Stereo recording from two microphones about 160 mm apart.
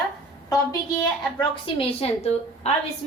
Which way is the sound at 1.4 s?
35° left (ahead or behind).